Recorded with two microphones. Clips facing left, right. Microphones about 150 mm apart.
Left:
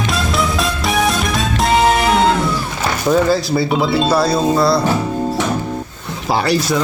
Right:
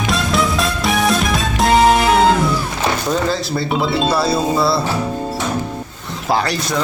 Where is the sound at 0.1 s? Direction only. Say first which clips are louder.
Right 3 dB; centre (ahead or behind).